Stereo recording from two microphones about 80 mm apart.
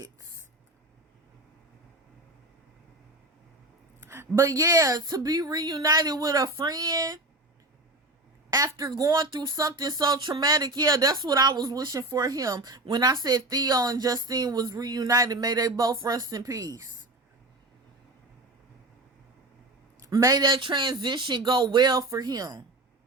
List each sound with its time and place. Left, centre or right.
4.0 s a sound: right
4.5 s speech: right
6.7 s speech: right
8.4 s a woman's voice: right
10.1 s speech: right
10.4 s speech: right
20.0 s speech: right
20.4 s speech: right
21.9 s speech: right